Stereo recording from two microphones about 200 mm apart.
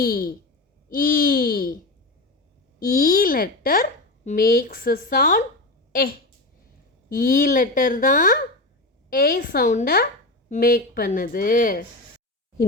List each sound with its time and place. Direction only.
0.0 s speech: 45° left (ahead or behind)